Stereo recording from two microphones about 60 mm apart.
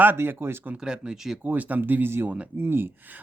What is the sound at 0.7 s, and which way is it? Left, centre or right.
Speech, centre.